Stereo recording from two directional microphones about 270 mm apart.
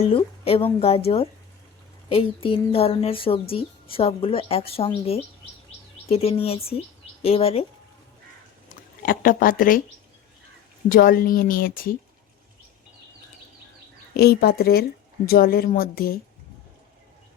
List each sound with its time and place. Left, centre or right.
0.1 s a woman's voice: left
9.0 s a woman's voice: left
10.8 s a woman's voice: left
14.1 s a woman's voice: left